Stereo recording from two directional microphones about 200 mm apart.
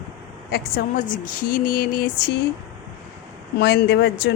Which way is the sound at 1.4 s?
45° left (ahead or behind).